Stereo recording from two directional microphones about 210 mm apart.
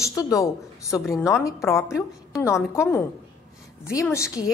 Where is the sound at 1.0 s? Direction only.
Centre (ahead or behind).